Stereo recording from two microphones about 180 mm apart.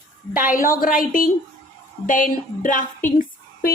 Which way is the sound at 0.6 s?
50° left (ahead or behind).